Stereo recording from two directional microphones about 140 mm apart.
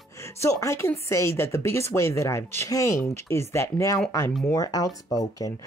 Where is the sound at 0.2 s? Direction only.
20° left (ahead or behind).